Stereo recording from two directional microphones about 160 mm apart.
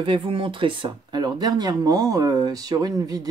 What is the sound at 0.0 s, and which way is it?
Speech, 30° right (ahead or behind).